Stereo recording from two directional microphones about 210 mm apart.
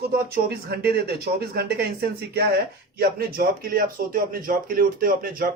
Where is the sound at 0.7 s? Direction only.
45° right (ahead or behind).